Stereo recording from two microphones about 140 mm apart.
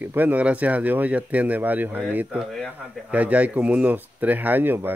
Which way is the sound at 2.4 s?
Centre (ahead or behind).